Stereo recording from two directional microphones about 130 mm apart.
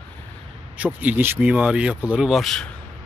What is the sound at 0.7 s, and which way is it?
Speech, 10° right (ahead or behind).